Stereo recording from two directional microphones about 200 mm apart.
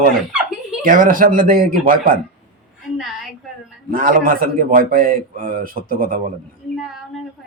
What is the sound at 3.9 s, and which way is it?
A man's voice, 45° right (ahead or behind).